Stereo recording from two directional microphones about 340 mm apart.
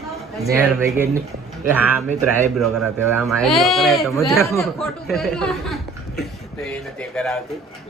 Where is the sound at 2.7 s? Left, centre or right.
Right.